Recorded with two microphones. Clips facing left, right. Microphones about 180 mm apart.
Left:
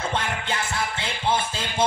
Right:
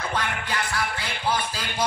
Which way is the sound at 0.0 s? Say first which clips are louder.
Left 1 dB; 25° left (ahead or behind).